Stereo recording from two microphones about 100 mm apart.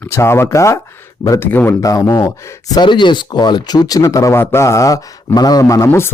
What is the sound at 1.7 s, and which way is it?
Speech, 35° left (ahead or behind).